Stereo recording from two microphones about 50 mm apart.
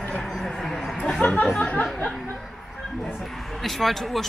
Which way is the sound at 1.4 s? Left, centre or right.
Left.